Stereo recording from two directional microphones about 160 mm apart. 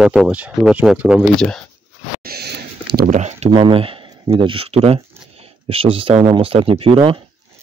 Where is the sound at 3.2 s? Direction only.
45° right (ahead or behind).